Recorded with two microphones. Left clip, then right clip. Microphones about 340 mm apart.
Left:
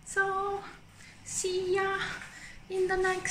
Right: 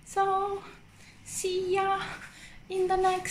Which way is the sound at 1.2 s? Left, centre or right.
Centre.